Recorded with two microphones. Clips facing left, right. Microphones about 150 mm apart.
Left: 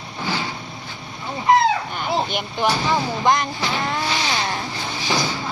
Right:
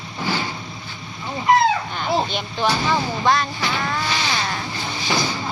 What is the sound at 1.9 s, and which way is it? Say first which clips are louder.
Artillery fire: right 1 dB; 10° left (ahead or behind).